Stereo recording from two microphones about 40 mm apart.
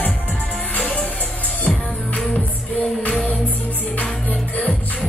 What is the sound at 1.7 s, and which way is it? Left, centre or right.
Music, left.